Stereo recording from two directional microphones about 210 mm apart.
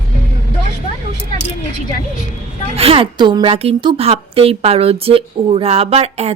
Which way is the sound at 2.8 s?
25° right (ahead or behind).